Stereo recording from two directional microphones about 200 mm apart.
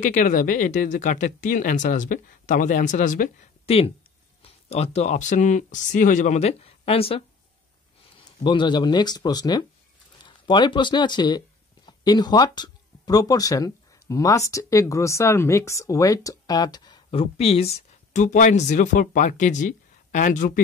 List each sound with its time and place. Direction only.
0.0 s speech: 40° left (ahead or behind)
8.5 s speech: 25° left (ahead or behind); by 20.6 s 40° left (ahead or behind)